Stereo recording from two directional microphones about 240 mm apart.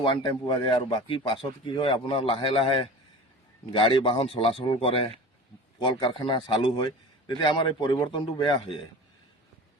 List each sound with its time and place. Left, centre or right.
0.0 s speech: left